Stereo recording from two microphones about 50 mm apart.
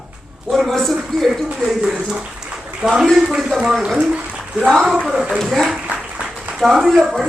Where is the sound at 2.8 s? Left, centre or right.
Centre.